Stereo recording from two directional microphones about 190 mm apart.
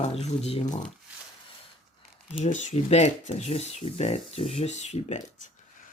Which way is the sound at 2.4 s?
40° left (ahead or behind).